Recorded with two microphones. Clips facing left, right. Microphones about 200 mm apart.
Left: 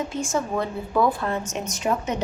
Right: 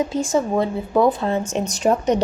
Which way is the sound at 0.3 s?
30° right (ahead or behind).